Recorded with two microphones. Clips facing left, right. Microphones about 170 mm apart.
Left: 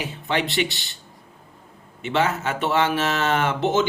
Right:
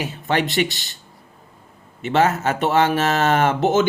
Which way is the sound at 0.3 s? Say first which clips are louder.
Right 3 dB; 45° right (ahead or behind).